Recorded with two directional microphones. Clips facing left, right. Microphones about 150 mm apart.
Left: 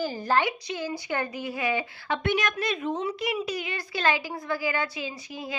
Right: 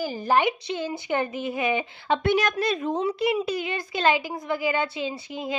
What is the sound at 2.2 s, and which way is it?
A woman's voice, 35° right (ahead or behind).